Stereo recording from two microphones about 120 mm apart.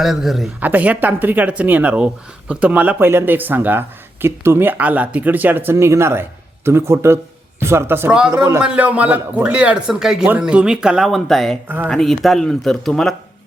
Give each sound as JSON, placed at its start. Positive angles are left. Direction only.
{"t": 0.0, "sound": "speech", "side_deg": 0}
{"t": 0.6, "sound": "speech", "side_deg": -15}